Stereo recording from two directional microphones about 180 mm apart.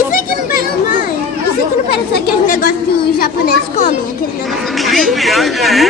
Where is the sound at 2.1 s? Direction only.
50° left (ahead or behind).